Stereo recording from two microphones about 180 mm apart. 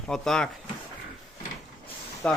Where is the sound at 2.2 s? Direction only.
5° left (ahead or behind).